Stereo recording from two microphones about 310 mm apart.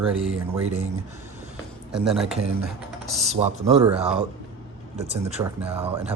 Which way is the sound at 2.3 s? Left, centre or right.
Right.